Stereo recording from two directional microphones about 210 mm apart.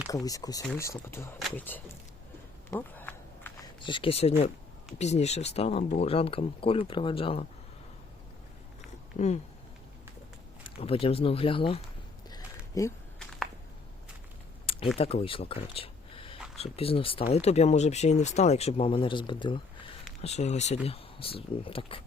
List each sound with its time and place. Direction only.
0.1 s speech: 15° left (ahead or behind)
2.6 s a sound: 10° left (ahead or behind)
3.8 s speech: 25° left (ahead or behind)
9.1 s speech: 35° left (ahead or behind)
10.8 s speech: 25° left (ahead or behind)
12.3 s a sound: 15° left (ahead or behind)
14.9 s speech: 30° left (ahead or behind)